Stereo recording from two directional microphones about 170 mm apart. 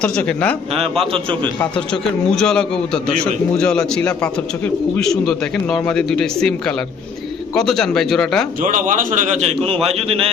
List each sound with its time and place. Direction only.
0.0 s a man's voice: 5° left (ahead or behind)
0.7 s a man's voice: 35° right (ahead or behind)
1.9 s a man's voice: 5° left (ahead or behind)
8.6 s a man's voice: 50° right (ahead or behind)
9.8 s a man's voice: 35° right (ahead or behind)